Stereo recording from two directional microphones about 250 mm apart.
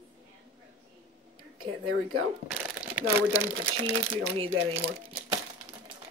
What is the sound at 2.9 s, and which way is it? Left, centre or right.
Speech, centre.